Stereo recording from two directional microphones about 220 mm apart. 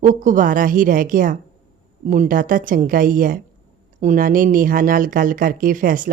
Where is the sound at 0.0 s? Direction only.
35° right (ahead or behind).